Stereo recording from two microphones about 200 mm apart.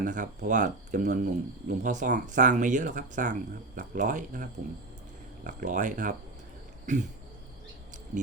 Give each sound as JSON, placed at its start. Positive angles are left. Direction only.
{"t": 0.0, "sound": "speech", "side_deg": -40}